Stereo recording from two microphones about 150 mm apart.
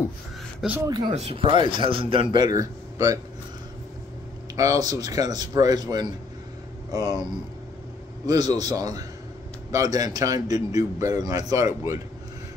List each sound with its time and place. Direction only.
0.7 s speech: 25° right (ahead or behind)
1.1 s speech: 40° right (ahead or behind); by 3.2 s 20° right (ahead or behind)
4.8 s speech: 25° right (ahead or behind)
8.3 s speech: 25° right (ahead or behind)